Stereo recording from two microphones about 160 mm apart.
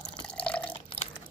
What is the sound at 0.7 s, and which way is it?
Drip, 35° left (ahead or behind).